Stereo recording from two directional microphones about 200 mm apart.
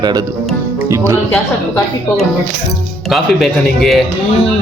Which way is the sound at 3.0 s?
Centre (ahead or behind).